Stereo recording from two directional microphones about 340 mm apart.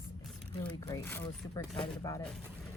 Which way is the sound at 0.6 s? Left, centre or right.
Centre.